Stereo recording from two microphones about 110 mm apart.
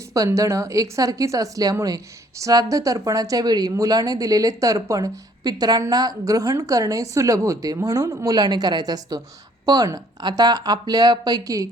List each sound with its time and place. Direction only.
0.1 s speech: 30° right (ahead or behind)